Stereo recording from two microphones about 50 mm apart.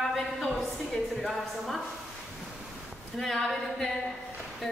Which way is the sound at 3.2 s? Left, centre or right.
Centre.